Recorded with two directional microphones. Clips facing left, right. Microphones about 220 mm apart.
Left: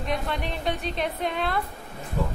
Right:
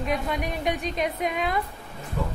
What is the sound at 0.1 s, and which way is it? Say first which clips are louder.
A woman's voice: even; 10° right (ahead or behind).